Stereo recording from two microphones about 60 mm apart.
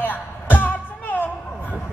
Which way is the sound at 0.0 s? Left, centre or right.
Left.